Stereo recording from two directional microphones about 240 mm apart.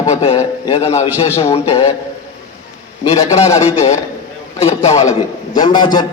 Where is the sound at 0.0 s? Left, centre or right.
Left.